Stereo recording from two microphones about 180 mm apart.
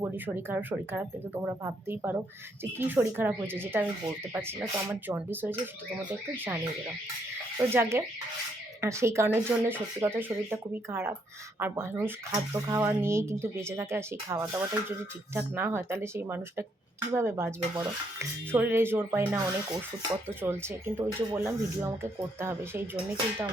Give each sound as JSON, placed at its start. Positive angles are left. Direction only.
{"t": 0.0, "sound": "speech", "side_deg": -10}
{"t": 7.7, "sound": "speech", "side_deg": -15}